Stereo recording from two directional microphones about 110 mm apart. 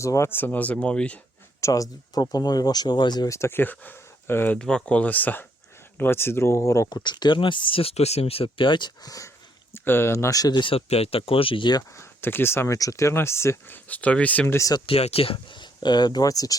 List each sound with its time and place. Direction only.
0.0 s speech: 25° left (ahead or behind); by 1.2 s 10° left (ahead or behind)
1.6 s speech: 30° left (ahead or behind)
3.3 s speech: 20° left (ahead or behind)
4.5 s speech: 5° left (ahead or behind); by 6.8 s 30° left (ahead or behind)
6.9 s speech: 40° left (ahead or behind)
9.7 s speech: 20° left (ahead or behind); by 11.8 s 50° left (ahead or behind)
11.9 s speech: 20° left (ahead or behind)
14.8 s speech: 65° left (ahead or behind); by 16.6 s 35° left (ahead or behind)